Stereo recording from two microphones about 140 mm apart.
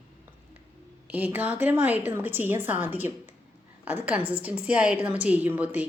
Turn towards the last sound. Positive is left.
turn(degrees=-10)  # may be behind; listen again after turning